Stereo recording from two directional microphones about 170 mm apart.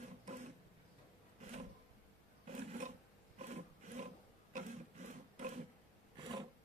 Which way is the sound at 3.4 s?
40° right (ahead or behind).